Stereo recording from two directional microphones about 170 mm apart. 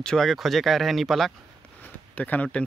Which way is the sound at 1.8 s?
10° left (ahead or behind).